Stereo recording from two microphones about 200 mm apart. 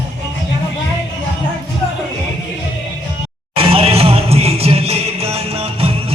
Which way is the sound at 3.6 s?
30° right (ahead or behind).